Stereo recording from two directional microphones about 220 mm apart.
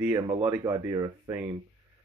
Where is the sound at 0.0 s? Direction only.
15° right (ahead or behind).